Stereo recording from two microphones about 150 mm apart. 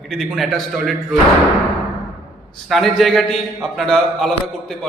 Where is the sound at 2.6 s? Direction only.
Centre (ahead or behind).